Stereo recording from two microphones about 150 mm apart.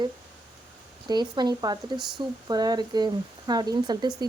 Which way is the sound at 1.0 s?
30° right (ahead or behind).